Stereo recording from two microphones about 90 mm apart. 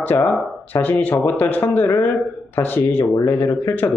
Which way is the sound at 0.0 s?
20° left (ahead or behind).